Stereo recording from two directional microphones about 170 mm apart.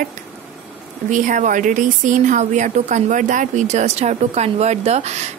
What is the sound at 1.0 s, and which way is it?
Speech, 50° right (ahead or behind).